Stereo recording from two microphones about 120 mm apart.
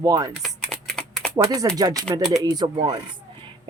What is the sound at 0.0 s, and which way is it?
Speech, 35° right (ahead or behind).